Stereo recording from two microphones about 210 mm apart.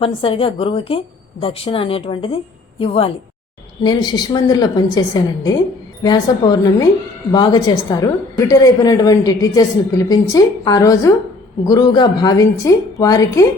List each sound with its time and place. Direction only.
0.0 s a woman's voice: 25° left (ahead or behind)